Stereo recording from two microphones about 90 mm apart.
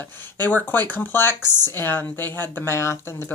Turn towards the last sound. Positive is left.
turn(degrees=30)  # may be behind; listen again after turning